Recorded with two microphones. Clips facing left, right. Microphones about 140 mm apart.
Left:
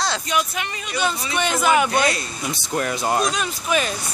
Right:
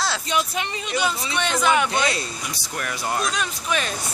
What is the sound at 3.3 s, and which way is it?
Speech, 5° left (ahead or behind).